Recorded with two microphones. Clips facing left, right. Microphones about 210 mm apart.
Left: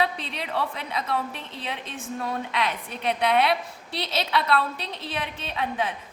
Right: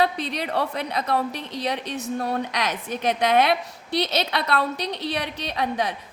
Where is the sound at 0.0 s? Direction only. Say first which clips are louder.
Right 4 dB; 40° right (ahead or behind).